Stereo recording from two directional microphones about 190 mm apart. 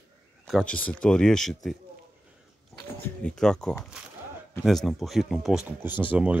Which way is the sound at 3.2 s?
5° left (ahead or behind).